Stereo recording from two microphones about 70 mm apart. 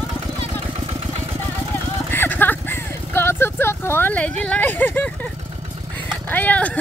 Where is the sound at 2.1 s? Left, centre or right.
Left.